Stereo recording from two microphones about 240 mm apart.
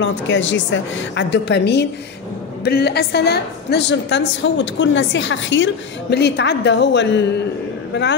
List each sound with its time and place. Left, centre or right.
0.0 s a woman's voice: left